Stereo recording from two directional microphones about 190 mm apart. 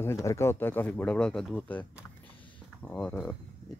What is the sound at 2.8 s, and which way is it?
Speech, 5° left (ahead or behind).